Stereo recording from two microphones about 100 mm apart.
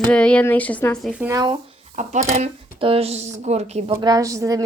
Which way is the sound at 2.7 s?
70° right (ahead or behind).